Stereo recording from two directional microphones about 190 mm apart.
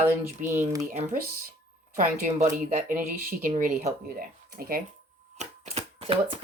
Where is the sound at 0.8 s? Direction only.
40° right (ahead or behind).